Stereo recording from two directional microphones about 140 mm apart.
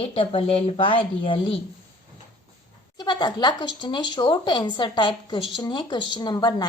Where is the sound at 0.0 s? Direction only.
40° left (ahead or behind).